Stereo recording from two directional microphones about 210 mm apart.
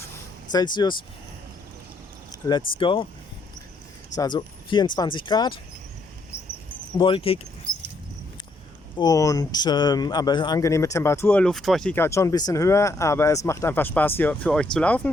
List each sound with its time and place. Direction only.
0.5 s speech: 20° left (ahead or behind)
2.5 s speech: 25° left (ahead or behind)
4.2 s speech: 20° left (ahead or behind)
7.0 s speech: 25° left (ahead or behind)
9.0 s a man's voice: 15° left (ahead or behind)